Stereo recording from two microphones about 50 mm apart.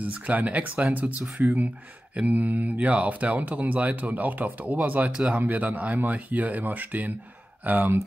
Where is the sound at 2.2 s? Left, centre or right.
Right.